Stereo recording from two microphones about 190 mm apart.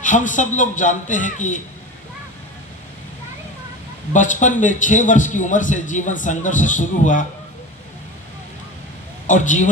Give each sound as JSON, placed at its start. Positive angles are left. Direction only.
{"t": 0.0, "sound": "a man's voice", "side_deg": 40}
{"t": 4.1, "sound": "a man's voice", "side_deg": 40}
{"t": 9.2, "sound": "a man's voice", "side_deg": 40}